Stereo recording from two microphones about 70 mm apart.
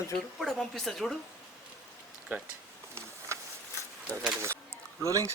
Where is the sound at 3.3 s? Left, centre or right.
Right.